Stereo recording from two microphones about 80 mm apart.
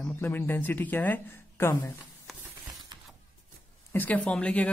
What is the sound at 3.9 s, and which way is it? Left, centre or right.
Speech, left.